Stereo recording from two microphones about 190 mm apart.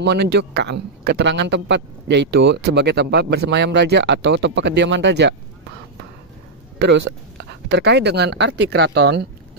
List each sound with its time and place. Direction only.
0.0 s a man's voice: 60° right (ahead or behind)
6.8 s a man's voice: 70° right (ahead or behind)